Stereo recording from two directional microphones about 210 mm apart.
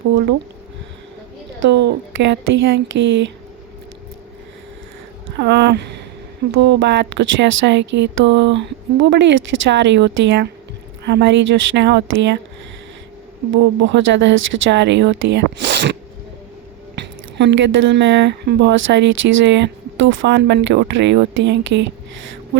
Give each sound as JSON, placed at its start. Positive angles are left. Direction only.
{"t": 1.6, "sound": "speech", "side_deg": -55}
{"t": 5.4, "sound": "speech", "side_deg": -55}
{"t": 13.5, "sound": "speech", "side_deg": -60}
{"t": 16.9, "sound": "speech", "side_deg": -55}